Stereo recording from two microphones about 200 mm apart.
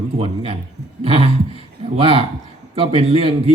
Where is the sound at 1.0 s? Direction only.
30° right (ahead or behind).